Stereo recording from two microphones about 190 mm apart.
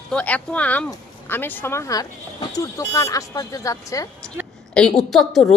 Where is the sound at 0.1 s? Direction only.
5° left (ahead or behind).